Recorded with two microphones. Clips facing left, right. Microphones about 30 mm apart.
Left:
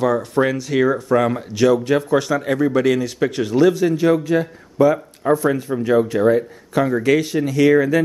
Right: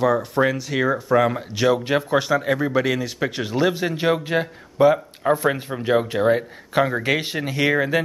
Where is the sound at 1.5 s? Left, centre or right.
Centre.